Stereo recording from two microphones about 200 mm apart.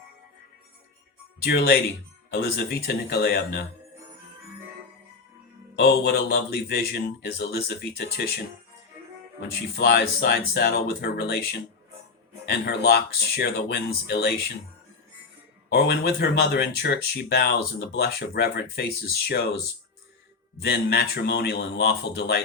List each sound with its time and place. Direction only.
1.5 s a man's voice: 50° left (ahead or behind)
5.7 s a man's voice: 55° left (ahead or behind)
9.7 s a man's voice: 55° left (ahead or behind)
12.5 s speech: 55° left (ahead or behind)
15.7 s speech: 55° left (ahead or behind)
20.6 s speech: 55° left (ahead or behind)